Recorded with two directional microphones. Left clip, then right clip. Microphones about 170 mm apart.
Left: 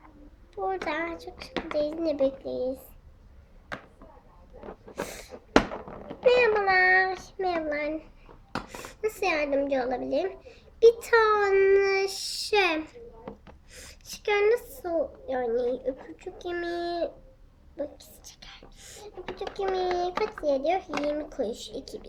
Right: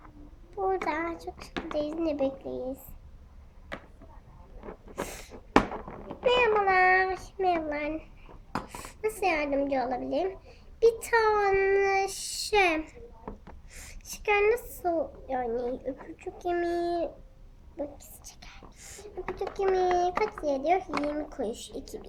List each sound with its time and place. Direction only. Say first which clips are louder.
0.9 s a child's voice: even; 10° left (ahead or behind)
4.9 s a sound: left 1 dB; 10° left (ahead or behind)
6.2 s a woman's voice: left 2 dB; 10° left (ahead or behind)
13.2 s a sound: left 1 dB; 15° right (ahead or behind)
13.7 s a child's voice: left 2 dB; 10° left (ahead or behind)
17.7 s whispering: left 2 dB; 10° left (ahead or behind)
19.5 s a child's voice: right 2 dB; 5° left (ahead or behind)